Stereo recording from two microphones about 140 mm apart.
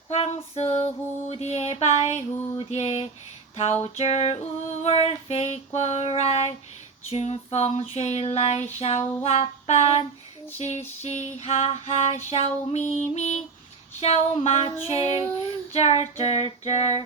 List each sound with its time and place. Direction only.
0.1 s a sound: 45° left (ahead or behind)
1.3 s child singing: 50° left (ahead or behind)
2.3 s female singing: 20° left (ahead or behind)
2.6 s child singing: 50° left (ahead or behind)
3.5 s a sound: 45° left (ahead or behind)
3.9 s child singing: 50° left (ahead or behind)